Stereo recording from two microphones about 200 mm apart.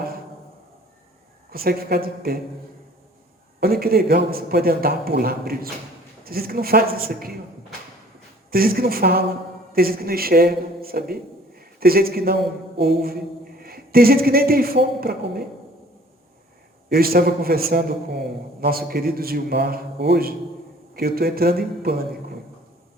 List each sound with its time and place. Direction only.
1.5 s a man's voice: 50° right (ahead or behind)
3.6 s a man's voice: 50° right (ahead or behind)
8.4 s a man's voice: 50° right (ahead or behind)
16.9 s a man's voice: 50° right (ahead or behind)